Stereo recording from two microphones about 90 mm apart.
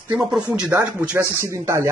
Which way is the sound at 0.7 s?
35° right (ahead or behind).